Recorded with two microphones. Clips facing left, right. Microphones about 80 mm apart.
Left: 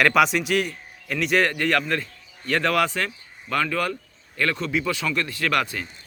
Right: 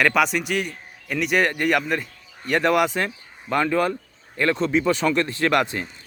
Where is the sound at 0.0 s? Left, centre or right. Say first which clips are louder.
Left 1 dB; centre.